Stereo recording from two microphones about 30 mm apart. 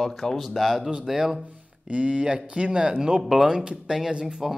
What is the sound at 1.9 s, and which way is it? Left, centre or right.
Speech, right.